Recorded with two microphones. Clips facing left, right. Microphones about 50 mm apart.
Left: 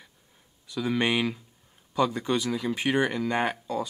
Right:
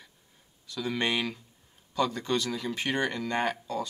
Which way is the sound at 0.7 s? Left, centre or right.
Centre.